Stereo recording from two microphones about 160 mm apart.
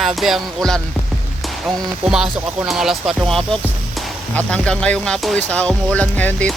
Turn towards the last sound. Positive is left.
turn(degrees=10)  # may be behind; listen again after turning